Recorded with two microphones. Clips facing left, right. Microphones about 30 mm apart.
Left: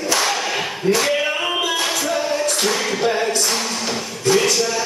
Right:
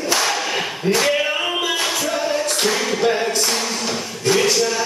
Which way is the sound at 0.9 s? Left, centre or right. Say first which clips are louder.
Right 1 dB; centre.